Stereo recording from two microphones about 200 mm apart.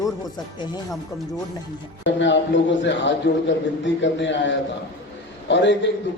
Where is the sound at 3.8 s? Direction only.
65° left (ahead or behind).